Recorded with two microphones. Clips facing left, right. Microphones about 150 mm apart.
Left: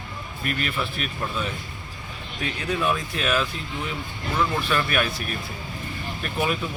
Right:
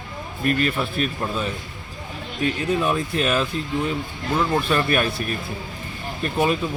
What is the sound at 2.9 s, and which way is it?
Speech, 30° right (ahead or behind).